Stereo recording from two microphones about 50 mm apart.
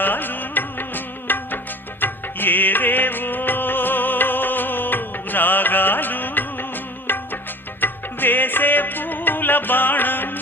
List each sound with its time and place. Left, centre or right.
0.0 s music: left